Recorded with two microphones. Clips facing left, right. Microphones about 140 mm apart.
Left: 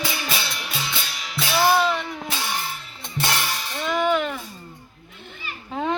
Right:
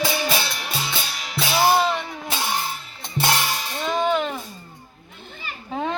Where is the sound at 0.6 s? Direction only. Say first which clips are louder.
Right 2 dB; 40° right (ahead or behind).